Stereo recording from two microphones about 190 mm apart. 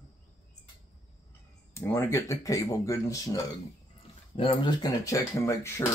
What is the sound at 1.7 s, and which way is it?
Speech, 15° left (ahead or behind).